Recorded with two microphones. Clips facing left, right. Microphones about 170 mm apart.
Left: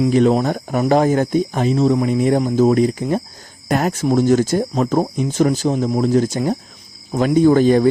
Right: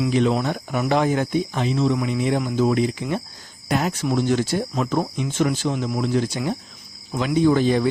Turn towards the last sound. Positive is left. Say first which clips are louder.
# left 6 dB
turn(degrees=45)  # may be behind; listen again after turning